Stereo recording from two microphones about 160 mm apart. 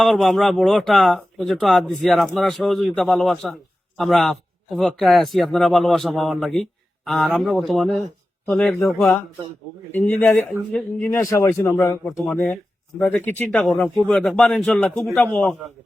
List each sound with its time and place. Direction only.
0.0 s speech: 5° left (ahead or behind)
9.9 s a man's voice: 15° left (ahead or behind)